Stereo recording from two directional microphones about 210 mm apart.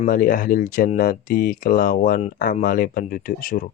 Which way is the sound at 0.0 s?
40° left (ahead or behind).